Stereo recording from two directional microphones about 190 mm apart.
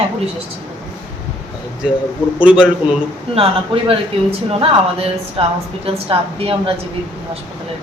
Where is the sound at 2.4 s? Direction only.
5° right (ahead or behind).